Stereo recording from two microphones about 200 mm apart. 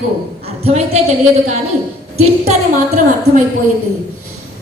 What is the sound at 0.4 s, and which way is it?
Speech, 30° right (ahead or behind).